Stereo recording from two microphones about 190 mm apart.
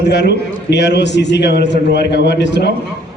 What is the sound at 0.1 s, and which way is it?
A man's voice, 65° left (ahead or behind).